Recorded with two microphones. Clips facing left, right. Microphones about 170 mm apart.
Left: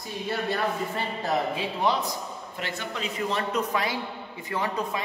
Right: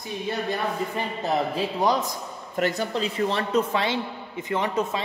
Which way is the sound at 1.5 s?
40° right (ahead or behind).